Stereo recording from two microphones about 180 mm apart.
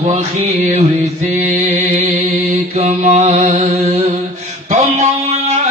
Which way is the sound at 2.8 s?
35° right (ahead or behind).